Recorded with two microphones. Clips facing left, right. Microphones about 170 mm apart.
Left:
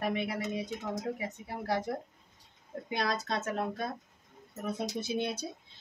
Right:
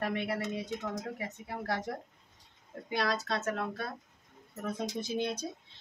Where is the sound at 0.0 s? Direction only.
15° left (ahead or behind).